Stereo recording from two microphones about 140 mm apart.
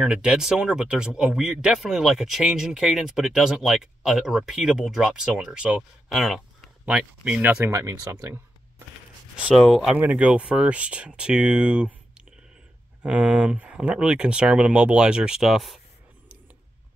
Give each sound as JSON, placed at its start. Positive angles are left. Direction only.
{"t": 0.0, "sound": "speech", "side_deg": -5}
{"t": 7.6, "sound": "speech", "side_deg": -20}
{"t": 9.4, "sound": "speech", "side_deg": -5}
{"t": 13.0, "sound": "speech", "side_deg": -5}